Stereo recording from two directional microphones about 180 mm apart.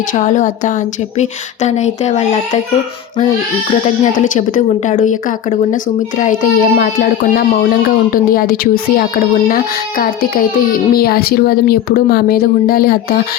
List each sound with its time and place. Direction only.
0.1 s speech: 45° left (ahead or behind)
4.0 s a child's voice: 45° left (ahead or behind)